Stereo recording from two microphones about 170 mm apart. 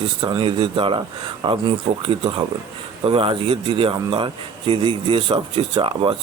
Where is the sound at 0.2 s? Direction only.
30° right (ahead or behind).